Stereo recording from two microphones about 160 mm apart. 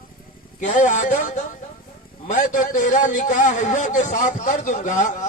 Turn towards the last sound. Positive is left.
turn(degrees=55)  # may be behind; listen again after turning